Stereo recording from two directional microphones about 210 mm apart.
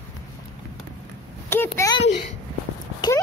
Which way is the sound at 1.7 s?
15° left (ahead or behind).